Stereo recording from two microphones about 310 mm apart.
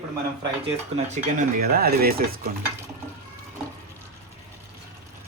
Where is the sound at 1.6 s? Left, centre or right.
Right.